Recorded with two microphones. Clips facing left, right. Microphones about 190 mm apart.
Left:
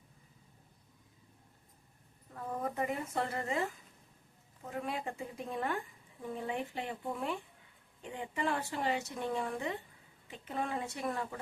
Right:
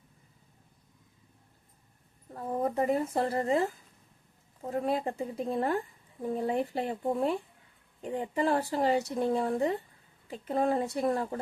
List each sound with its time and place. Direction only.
2.3 s speech: 35° right (ahead or behind)